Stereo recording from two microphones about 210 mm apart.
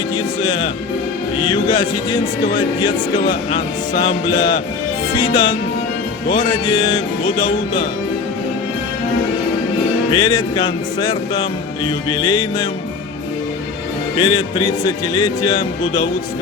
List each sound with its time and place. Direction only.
0.4 s speech: 20° left (ahead or behind)
5.1 s speech: 20° left (ahead or behind)
10.1 s speech: 20° left (ahead or behind)
14.2 s speech: 20° left (ahead or behind)